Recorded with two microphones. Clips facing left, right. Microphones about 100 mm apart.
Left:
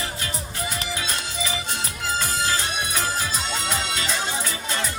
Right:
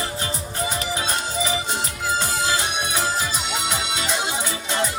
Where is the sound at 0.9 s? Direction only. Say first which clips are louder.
Right 4 dB; 35° right (ahead or behind).